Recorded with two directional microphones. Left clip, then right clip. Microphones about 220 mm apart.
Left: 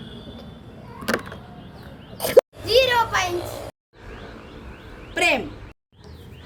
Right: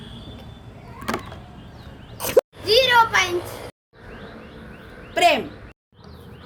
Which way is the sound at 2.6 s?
15° left (ahead or behind).